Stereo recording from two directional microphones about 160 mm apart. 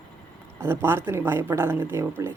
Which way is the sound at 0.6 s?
15° right (ahead or behind).